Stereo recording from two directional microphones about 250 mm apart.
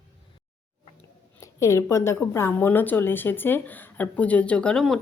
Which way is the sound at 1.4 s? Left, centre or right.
Centre.